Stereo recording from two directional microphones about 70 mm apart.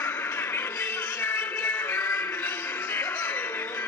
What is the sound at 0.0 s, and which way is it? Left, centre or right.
Music, left.